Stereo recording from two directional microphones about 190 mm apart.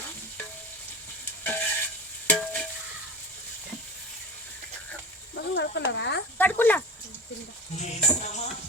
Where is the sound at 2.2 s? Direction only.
5° left (ahead or behind).